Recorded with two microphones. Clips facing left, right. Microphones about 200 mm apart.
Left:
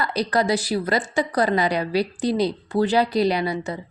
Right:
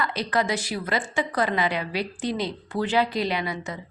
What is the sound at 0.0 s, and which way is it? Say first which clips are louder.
A woman's voice: left 4 dB; 40° left (ahead or behind).